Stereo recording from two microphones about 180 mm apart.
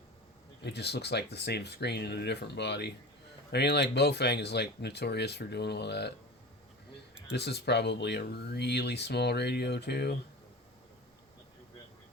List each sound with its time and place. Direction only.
0.6 s speech: 65° left (ahead or behind)
7.3 s speech: 65° left (ahead or behind)